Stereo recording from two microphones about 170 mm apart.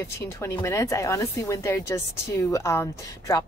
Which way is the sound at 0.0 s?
15° left (ahead or behind).